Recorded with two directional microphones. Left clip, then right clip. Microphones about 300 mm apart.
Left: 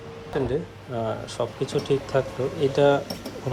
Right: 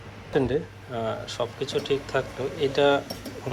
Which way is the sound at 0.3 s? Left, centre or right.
Centre.